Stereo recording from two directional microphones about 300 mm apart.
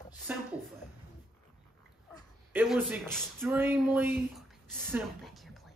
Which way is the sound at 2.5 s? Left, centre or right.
Centre.